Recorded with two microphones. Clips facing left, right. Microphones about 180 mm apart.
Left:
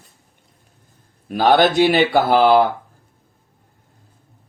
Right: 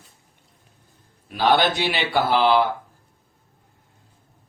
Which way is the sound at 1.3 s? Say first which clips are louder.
Left 5 dB; 45° left (ahead or behind).